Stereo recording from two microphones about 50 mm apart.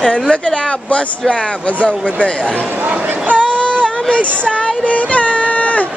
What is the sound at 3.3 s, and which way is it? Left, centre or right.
Child singing, left.